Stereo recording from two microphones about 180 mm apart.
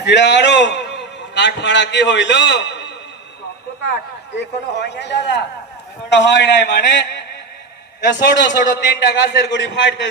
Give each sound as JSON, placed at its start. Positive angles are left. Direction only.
{"t": 0.0, "sound": "a man's voice", "side_deg": 75}
{"t": 4.4, "sound": "a man's voice", "side_deg": 75}